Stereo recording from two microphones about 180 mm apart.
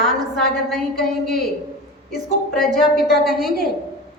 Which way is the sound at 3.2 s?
Centre (ahead or behind).